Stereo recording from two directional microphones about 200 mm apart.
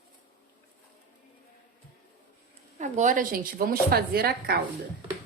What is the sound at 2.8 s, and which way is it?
Speech, 40° right (ahead or behind).